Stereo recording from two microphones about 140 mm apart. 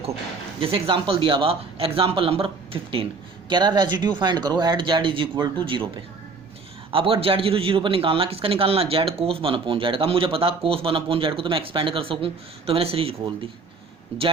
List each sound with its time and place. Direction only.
0.6 s speech: 40° right (ahead or behind)
6.9 s speech: 40° right (ahead or behind)